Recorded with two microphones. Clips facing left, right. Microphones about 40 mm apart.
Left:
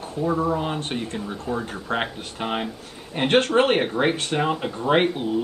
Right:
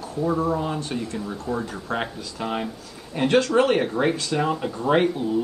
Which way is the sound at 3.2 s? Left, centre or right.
Left.